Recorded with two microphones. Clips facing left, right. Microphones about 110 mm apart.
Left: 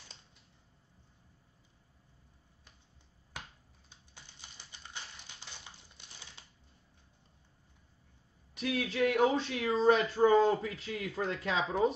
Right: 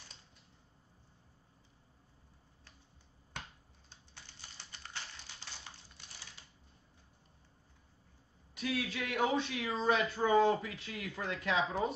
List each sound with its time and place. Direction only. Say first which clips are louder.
4.1 s typing: even; 15° left (ahead or behind)
5.9 s typewriter: even; 25° left (ahead or behind)
8.7 s speech: left 8 dB; 30° left (ahead or behind)